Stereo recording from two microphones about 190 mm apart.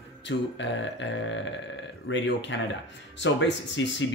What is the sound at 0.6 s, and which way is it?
Speech, 70° left (ahead or behind).